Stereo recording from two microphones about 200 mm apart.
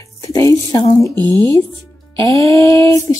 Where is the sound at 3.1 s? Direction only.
15° left (ahead or behind).